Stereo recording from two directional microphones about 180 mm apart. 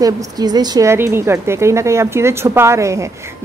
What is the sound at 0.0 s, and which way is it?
A woman's voice, 20° right (ahead or behind).